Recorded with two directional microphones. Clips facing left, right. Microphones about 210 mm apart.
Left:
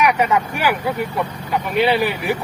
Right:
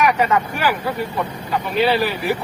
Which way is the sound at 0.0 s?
15° left (ahead or behind).